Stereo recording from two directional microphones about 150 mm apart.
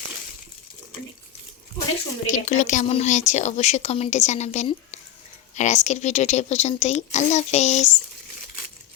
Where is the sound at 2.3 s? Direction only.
55° left (ahead or behind).